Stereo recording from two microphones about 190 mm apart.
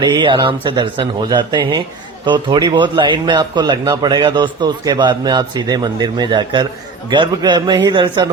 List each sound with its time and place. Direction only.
0.0 s speech: 25° right (ahead or behind)